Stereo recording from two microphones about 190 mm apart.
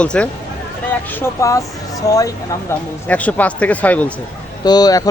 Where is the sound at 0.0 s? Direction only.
5° left (ahead or behind).